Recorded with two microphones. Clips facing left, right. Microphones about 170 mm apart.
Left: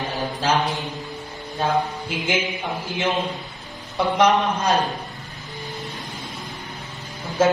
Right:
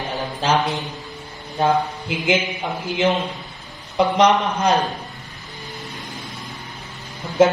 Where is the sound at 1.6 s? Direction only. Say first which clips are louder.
Right 3 dB; 20° right (ahead or behind).